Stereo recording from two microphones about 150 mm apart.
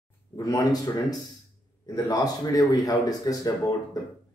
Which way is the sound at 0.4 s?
25° left (ahead or behind).